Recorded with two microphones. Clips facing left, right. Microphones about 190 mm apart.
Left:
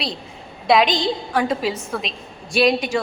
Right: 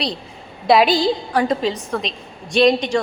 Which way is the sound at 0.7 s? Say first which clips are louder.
Right 3 dB; 5° right (ahead or behind).